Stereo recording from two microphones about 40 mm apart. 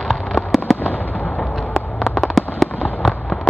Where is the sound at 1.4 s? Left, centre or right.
Centre.